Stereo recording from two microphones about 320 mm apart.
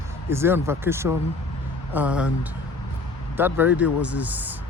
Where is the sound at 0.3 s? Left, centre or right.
Centre.